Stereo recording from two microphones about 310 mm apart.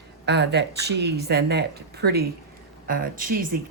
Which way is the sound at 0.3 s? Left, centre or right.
Right.